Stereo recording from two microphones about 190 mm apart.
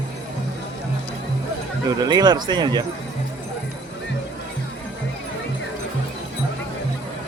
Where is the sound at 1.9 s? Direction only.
20° right (ahead or behind).